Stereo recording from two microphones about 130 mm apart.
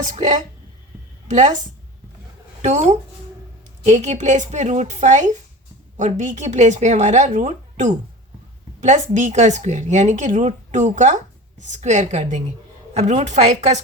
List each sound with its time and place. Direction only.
0.0 s speech: 70° right (ahead or behind)
2.6 s speech: 60° right (ahead or behind)